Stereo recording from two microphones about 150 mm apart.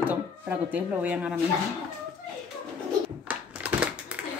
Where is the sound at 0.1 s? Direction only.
10° right (ahead or behind).